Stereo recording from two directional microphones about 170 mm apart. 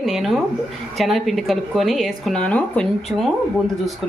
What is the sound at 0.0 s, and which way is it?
A woman's voice, centre (ahead or behind).